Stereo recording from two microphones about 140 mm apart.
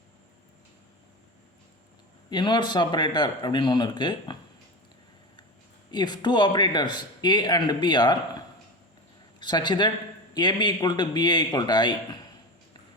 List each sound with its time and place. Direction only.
2.3 s speech: 35° left (ahead or behind)
5.9 s speech: 30° left (ahead or behind)
9.4 s speech: 30° left (ahead or behind)